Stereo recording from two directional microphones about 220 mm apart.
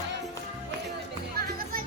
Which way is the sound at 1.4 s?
40° right (ahead or behind).